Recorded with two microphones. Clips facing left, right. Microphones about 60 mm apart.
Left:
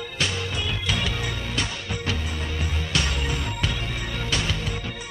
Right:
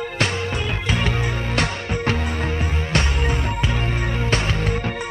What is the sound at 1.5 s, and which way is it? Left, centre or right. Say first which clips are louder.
Music: right 6 dB; right.